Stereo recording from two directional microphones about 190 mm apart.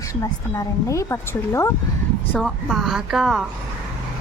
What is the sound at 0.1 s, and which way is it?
A woman's voice, 15° left (ahead or behind).